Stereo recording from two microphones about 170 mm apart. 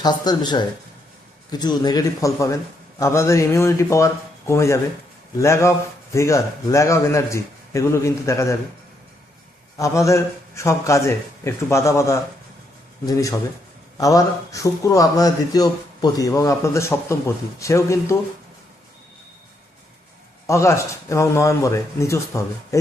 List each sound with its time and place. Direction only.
0.0 s speech: 25° left (ahead or behind)
9.7 s speech: 20° left (ahead or behind)
20.5 s speech: 15° left (ahead or behind)